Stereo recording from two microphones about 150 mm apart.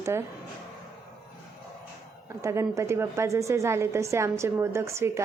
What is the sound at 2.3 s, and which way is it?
Speech, 20° right (ahead or behind).